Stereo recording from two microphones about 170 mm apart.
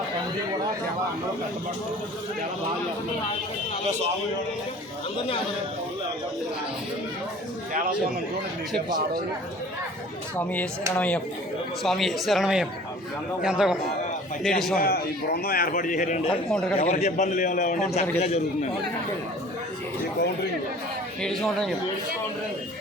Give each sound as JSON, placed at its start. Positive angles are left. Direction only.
{"t": 10.3, "sound": "speech", "side_deg": 10}
{"t": 14.8, "sound": "a man's voice", "side_deg": 65}
{"t": 16.5, "sound": "speech", "side_deg": 5}
{"t": 16.8, "sound": "a man's voice", "side_deg": 40}
{"t": 18.2, "sound": "a man's voice", "side_deg": 40}
{"t": 21.2, "sound": "speech", "side_deg": 0}